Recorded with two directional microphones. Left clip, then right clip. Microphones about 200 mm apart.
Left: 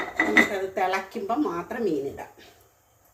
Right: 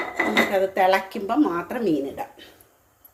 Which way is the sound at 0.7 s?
45° right (ahead or behind).